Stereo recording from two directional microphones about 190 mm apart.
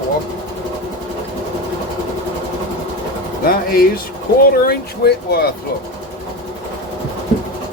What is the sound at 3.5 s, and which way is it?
Speech, 50° left (ahead or behind).